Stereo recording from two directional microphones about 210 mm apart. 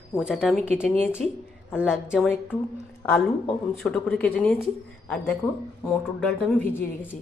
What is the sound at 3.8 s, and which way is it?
A woman's voice, 5° left (ahead or behind).